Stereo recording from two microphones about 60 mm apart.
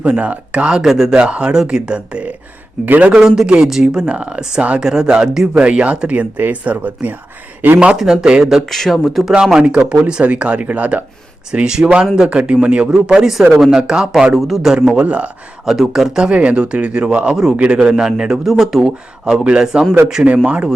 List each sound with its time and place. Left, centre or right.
0.0 s speech: right; by 1.1 s centre
1.1 s speech: centre
2.8 s speech: right
3.1 s speech: centre
4.0 s speech: centre
5.5 s speech: right
7.9 s speech: centre
8.7 s speech: centre
9.3 s speech: centre
11.5 s speech: centre
14.4 s speech: centre
14.9 s speech: right
15.6 s speech: centre
20.2 s speech: right